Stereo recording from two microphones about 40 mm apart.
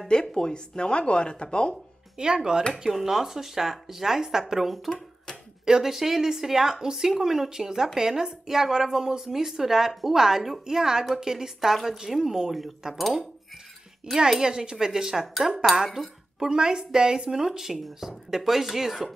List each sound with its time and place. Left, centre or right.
0.1 s speech: centre
2.1 s speech: centre
2.8 s a woman's voice: centre
14.4 s a woman's voice: centre